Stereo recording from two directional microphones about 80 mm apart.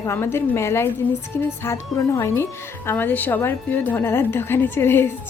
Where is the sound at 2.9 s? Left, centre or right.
Left.